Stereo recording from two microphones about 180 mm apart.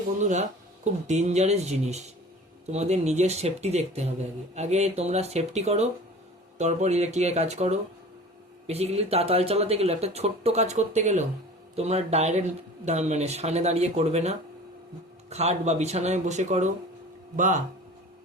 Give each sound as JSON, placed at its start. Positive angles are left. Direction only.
{"t": 0.2, "sound": "speech", "side_deg": -40}